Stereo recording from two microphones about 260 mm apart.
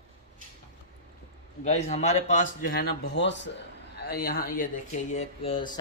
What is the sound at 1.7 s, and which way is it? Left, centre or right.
Speech, left.